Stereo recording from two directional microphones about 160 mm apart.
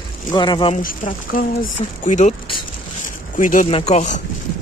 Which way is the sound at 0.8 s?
60° left (ahead or behind).